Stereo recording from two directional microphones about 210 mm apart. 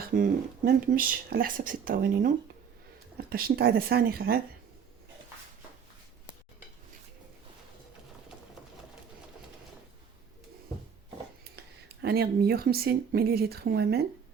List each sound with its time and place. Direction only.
0.0 s speech: 40° right (ahead or behind)
12.0 s speech: 45° right (ahead or behind)